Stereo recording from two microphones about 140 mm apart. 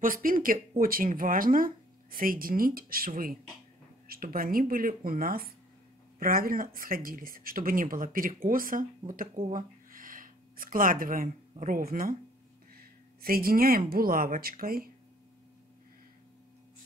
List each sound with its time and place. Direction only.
0.0 s speech: 80° right
9.5 s a sound: 80° right
11.6 s speech: 85° right
13.2 s speech: 90° right